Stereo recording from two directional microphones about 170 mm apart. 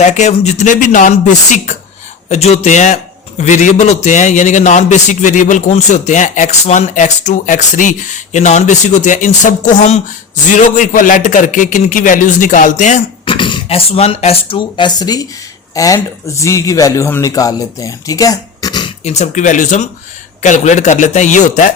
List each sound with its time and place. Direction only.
0.0 s a man's voice: 45° left (ahead or behind)
13.2 s a man's voice: 30° left (ahead or behind)
19.0 s a man's voice: 40° left (ahead or behind)